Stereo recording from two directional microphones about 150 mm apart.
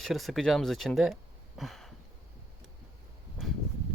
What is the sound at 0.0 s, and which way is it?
Speech, centre (ahead or behind).